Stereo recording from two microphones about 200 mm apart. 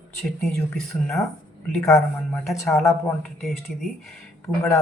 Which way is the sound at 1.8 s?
15° left (ahead or behind).